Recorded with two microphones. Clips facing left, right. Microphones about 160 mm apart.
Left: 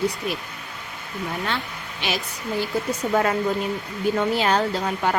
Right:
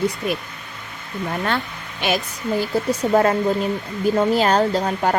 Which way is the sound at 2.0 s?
45° right (ahead or behind).